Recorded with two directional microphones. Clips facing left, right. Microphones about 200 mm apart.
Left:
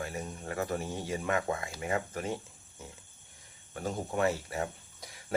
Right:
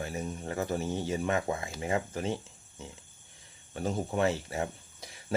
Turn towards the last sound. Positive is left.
turn(degrees=-25)  # may be behind; listen again after turning